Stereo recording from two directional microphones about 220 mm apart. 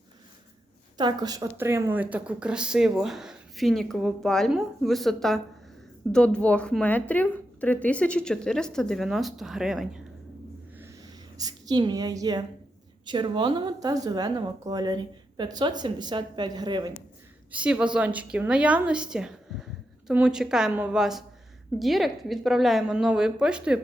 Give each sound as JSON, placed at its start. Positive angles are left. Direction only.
{"t": 0.9, "sound": "speech", "side_deg": -20}
{"t": 10.8, "sound": "a sound", "side_deg": -15}
{"t": 13.1, "sound": "speech", "side_deg": -20}
{"t": 17.5, "sound": "speech", "side_deg": -5}